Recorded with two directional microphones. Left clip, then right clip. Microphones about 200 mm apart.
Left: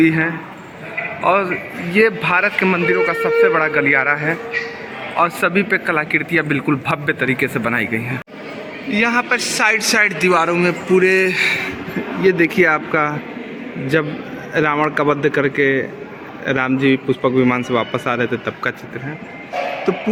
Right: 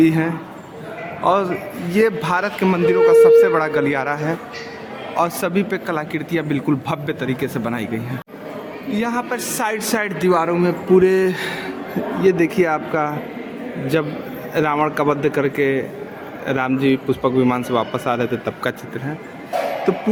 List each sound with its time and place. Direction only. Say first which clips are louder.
0.0 s a man's voice: left 1 dB; 20° right (ahead or behind)
19.9 s a man's voice: left 1 dB; 20° right (ahead or behind)